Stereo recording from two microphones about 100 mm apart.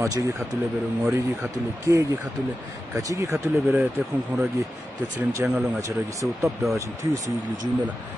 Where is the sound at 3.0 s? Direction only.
35° right (ahead or behind).